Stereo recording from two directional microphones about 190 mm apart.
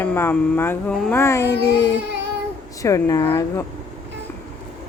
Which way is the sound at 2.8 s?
20° left (ahead or behind).